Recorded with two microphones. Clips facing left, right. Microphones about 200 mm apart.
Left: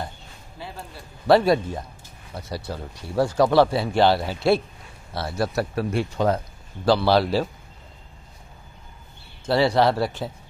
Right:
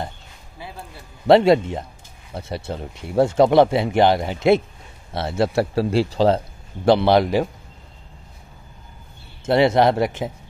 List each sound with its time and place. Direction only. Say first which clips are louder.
1.2 s speech: right 4 dB; 25° right (ahead or behind)
9.5 s speech: right 3 dB; 20° right (ahead or behind)